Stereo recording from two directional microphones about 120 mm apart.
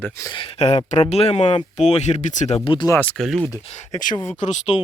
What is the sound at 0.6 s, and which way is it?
Speech, 65° left (ahead or behind).